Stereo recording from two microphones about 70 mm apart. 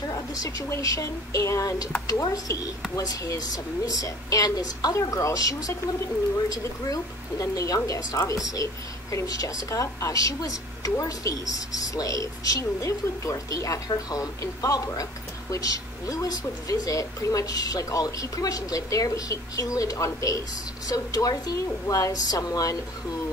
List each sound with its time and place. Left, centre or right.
0.1 s speech: left